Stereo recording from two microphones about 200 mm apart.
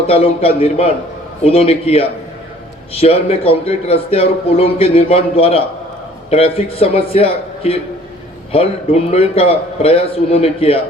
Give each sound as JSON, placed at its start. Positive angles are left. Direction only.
{"t": 0.1, "sound": "a man's voice", "side_deg": 30}